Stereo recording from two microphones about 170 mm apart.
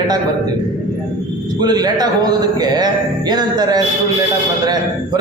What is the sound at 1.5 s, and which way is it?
A man's voice, 25° right (ahead or behind).